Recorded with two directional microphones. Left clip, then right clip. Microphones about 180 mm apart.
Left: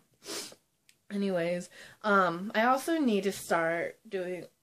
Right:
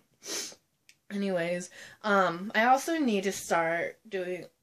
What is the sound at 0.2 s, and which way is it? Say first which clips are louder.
Speech: right 3 dB; centre (ahead or behind).